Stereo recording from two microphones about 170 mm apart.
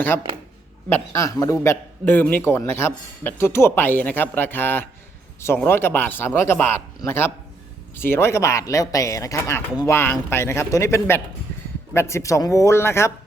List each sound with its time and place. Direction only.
0.9 s a man's voice: 15° left (ahead or behind)